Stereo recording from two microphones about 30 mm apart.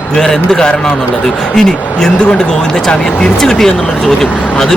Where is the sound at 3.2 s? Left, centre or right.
Left.